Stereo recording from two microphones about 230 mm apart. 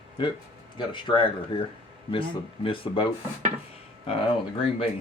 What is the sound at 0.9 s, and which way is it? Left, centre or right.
Speech, centre.